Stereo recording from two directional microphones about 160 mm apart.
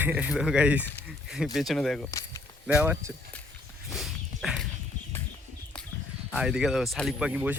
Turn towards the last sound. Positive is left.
turn(degrees=-10)  # may be behind; listen again after turning